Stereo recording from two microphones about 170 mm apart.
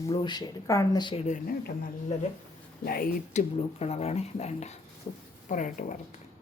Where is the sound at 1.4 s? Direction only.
60° left (ahead or behind).